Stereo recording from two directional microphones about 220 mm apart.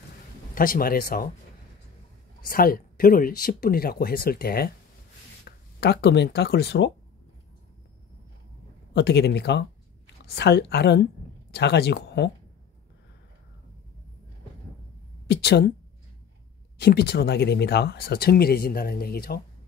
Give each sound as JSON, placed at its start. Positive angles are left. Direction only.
{"t": 0.6, "sound": "speech", "side_deg": 40}
{"t": 2.4, "sound": "speech", "side_deg": 40}
{"t": 8.9, "sound": "speech", "side_deg": 50}
{"t": 15.2, "sound": "a woman's voice", "side_deg": 50}
{"t": 16.7, "sound": "speech", "side_deg": 45}